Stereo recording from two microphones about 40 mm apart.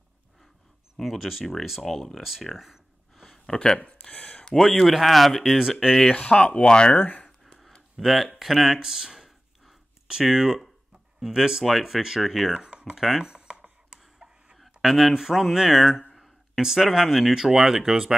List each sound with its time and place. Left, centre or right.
1.0 s speech: centre
2.4 s a sound: centre
3.4 s speech: centre
3.8 s a sound: left
4.6 s speech: centre
6.1 s speech: left
7.0 s speech: left
8.0 s speech: centre
8.7 s a sound: centre
10.3 s speech: centre
13.3 s computer keyboard: right
14.8 s speech: centre